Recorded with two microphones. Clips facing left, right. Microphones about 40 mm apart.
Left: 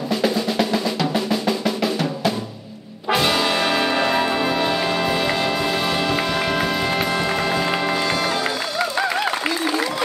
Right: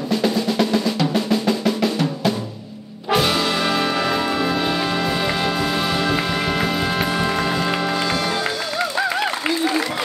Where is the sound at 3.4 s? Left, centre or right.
Centre.